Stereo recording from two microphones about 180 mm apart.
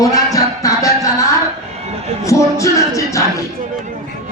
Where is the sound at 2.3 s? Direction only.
15° left (ahead or behind).